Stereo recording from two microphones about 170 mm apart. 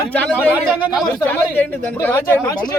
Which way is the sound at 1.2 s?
10° left (ahead or behind).